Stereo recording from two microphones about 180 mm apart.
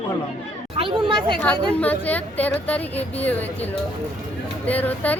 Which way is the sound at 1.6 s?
10° left (ahead or behind).